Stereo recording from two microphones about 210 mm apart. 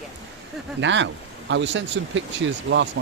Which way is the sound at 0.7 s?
60° right (ahead or behind).